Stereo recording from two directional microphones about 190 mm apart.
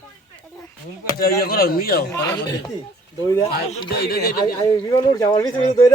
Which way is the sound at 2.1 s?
15° left (ahead or behind).